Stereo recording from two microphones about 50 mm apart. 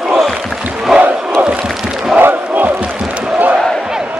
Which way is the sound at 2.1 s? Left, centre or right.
Right.